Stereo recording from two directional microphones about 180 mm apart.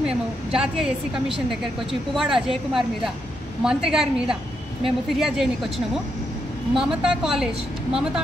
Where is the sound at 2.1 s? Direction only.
Centre (ahead or behind).